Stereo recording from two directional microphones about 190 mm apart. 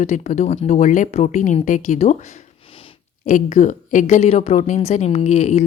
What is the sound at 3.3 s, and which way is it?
A woman's voice, 45° left (ahead or behind).